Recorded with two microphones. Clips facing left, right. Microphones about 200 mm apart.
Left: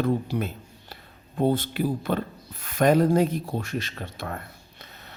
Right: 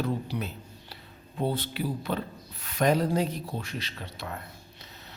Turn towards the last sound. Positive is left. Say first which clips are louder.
# left 4 dB
turn(degrees=50)  # may be behind; listen again after turning